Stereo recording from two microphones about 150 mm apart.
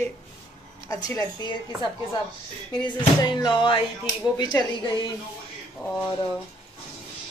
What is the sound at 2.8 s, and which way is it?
A woman's voice, 30° left (ahead or behind).